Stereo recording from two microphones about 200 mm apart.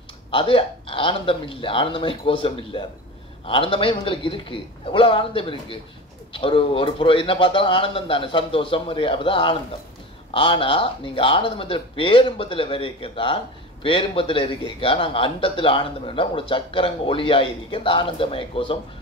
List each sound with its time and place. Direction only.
0.3 s speech: 25° left (ahead or behind)